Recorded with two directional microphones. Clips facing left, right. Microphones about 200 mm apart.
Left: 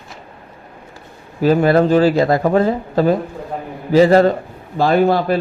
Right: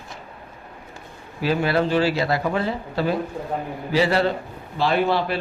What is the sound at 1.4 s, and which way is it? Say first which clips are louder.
Speech: left 8 dB; 45° left (ahead or behind).